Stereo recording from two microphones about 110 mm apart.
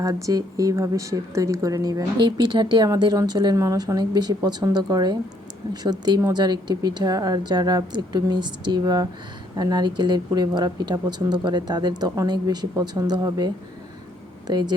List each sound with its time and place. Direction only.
0.0 s speech: 30° right (ahead or behind)
2.1 s speech: 45° right (ahead or behind)